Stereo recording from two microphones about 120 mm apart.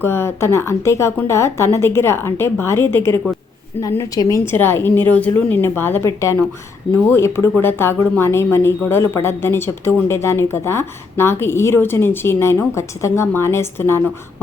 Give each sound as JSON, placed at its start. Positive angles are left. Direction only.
{"t": 0.0, "sound": "speech", "side_deg": 20}
{"t": 4.5, "sound": "a woman's voice", "side_deg": 20}